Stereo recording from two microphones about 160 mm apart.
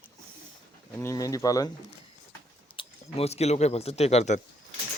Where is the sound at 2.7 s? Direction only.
40° left (ahead or behind).